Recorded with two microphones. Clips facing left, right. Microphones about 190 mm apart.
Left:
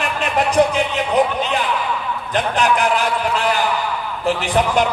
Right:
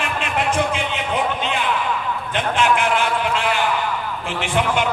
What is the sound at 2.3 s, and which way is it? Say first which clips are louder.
A man's voice: left 2 dB; 40° left (ahead or behind).